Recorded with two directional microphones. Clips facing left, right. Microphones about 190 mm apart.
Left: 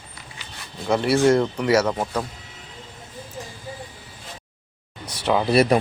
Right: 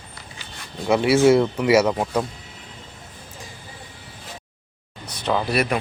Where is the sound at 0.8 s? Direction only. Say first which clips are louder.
Right 2 dB; 5° right (ahead or behind).